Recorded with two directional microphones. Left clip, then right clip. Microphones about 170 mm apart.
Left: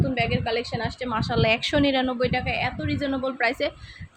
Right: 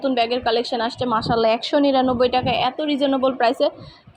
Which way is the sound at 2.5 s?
20° right (ahead or behind).